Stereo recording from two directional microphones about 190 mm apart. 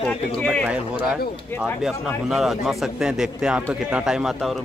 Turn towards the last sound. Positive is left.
turn(degrees=0)  # may be behind; listen again after turning